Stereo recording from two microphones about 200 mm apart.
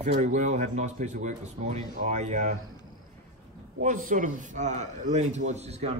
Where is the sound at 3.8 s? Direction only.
40° right (ahead or behind).